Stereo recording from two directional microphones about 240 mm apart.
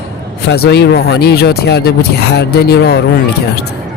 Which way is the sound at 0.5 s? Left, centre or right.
Left.